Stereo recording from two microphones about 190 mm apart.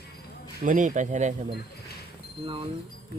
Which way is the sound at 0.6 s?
40° right (ahead or behind).